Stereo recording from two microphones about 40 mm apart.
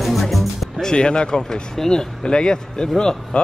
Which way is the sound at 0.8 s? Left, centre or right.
Left.